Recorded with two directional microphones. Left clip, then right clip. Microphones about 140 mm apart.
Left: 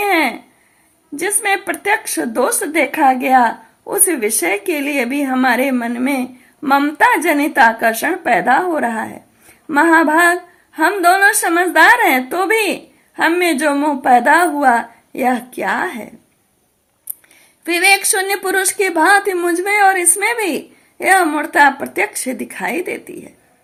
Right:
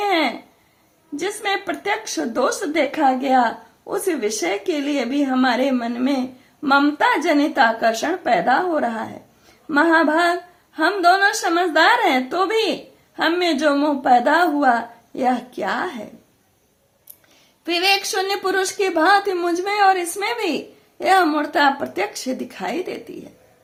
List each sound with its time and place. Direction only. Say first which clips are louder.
0.0 s a sound: left 4 dB; 25° left (ahead or behind)
1.4 s a woman's voice: left 6 dB; 25° left (ahead or behind)
17.7 s speech: left 6 dB; 25° left (ahead or behind)